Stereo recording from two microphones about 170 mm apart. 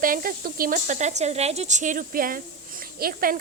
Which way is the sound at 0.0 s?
55° right (ahead or behind).